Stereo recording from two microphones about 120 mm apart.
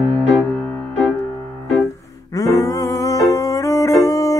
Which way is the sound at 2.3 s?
30° left (ahead or behind).